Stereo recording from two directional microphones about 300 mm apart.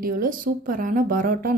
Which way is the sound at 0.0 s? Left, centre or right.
Right.